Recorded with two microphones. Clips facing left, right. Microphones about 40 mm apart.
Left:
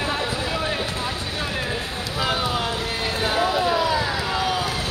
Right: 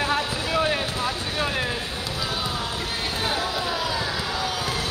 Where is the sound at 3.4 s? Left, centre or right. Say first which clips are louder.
Left 6 dB; left.